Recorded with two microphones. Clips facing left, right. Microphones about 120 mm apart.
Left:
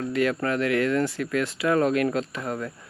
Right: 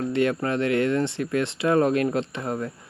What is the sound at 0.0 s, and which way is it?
Speech, 25° right (ahead or behind).